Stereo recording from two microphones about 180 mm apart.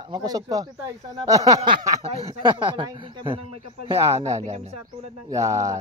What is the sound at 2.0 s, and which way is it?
Speech, 35° right (ahead or behind).